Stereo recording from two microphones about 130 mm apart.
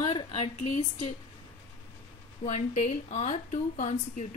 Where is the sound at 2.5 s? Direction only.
60° left (ahead or behind).